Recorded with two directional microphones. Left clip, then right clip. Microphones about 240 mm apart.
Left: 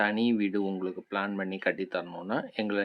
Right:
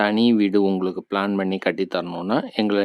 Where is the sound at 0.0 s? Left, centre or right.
Right.